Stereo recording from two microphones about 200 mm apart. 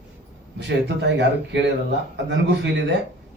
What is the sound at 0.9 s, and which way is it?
A man's voice, 60° right (ahead or behind).